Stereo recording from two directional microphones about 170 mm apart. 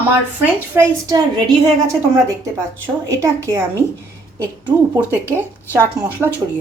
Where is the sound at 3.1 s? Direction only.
15° right (ahead or behind).